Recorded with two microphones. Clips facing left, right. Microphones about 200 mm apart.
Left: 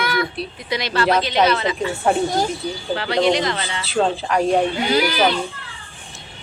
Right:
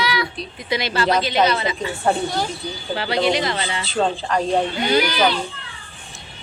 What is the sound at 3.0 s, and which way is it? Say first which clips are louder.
Speech: left 2 dB; 5° right (ahead or behind).